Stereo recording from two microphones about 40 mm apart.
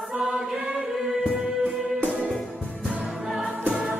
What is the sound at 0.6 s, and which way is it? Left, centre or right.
Music, centre.